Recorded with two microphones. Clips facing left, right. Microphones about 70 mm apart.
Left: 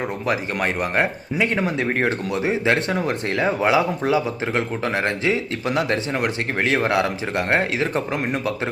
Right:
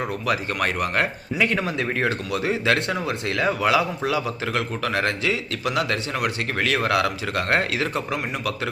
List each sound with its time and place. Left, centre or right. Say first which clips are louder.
0.3 s speech: left 1 dB; left
2.9 s speech: left 3 dB; left